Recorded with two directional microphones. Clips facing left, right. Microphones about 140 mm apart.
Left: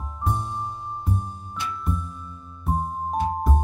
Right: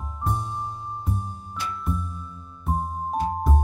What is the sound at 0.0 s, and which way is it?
Music, centre (ahead or behind).